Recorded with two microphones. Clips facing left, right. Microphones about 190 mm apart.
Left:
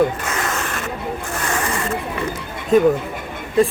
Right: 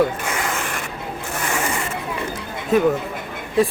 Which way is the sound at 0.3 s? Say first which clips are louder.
Left 1 dB; 15° right (ahead or behind).